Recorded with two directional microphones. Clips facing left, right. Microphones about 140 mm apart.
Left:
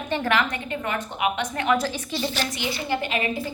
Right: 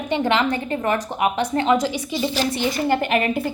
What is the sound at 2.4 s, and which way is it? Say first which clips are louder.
A woman's voice: right 7 dB; 35° right (ahead or behind).